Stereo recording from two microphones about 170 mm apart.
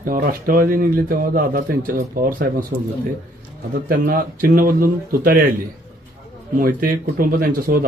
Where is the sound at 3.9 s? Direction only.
55° right (ahead or behind).